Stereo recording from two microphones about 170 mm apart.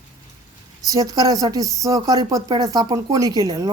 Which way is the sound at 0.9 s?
20° right (ahead or behind).